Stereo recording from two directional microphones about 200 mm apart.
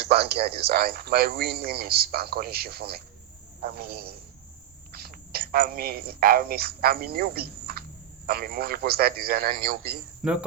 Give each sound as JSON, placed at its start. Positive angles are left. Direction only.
{"t": 0.0, "sound": "a man's voice", "side_deg": -55}
{"t": 10.2, "sound": "cricket", "side_deg": 0}